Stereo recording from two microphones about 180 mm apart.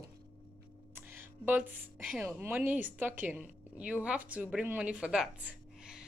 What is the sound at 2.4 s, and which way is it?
A woman's voice, 10° right (ahead or behind).